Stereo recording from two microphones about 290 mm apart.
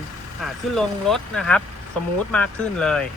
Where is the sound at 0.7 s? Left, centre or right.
Centre.